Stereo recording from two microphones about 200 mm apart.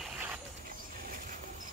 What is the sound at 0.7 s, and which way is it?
Vehicle, 45° right (ahead or behind).